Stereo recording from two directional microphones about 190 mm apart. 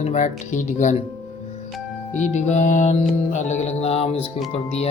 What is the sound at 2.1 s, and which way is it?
Music, 40° left (ahead or behind).